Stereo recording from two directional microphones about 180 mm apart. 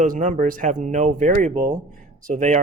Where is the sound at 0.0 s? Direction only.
40° right (ahead or behind).